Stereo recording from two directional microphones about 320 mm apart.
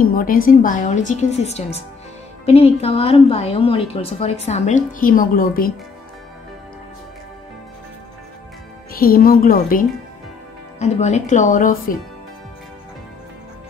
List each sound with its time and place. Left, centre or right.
0.0 s a woman's voice: left
8.9 s a woman's voice: left